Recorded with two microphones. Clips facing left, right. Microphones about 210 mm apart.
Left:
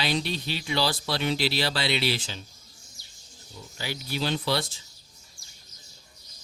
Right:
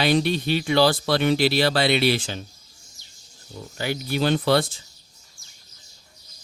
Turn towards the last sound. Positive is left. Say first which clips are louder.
# right 8 dB
turn(degrees=-55)  # may be behind; listen again after turning